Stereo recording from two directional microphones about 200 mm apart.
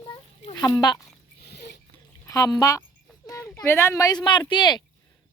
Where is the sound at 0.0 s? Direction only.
20° left (ahead or behind).